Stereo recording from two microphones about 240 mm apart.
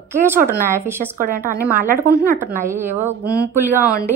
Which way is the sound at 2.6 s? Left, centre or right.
Centre.